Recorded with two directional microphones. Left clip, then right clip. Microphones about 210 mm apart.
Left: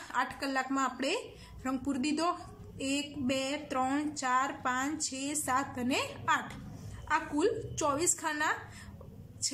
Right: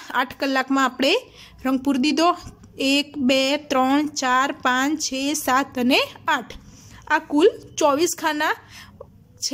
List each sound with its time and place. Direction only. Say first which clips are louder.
0.0 s a woman's voice: right 10 dB; 40° right (ahead or behind)